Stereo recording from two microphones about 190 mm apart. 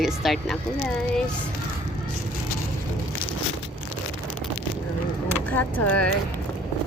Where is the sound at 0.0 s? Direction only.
Centre (ahead or behind).